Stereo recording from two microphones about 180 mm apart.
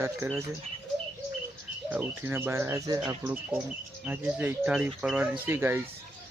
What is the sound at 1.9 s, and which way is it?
Speech, 10° right (ahead or behind).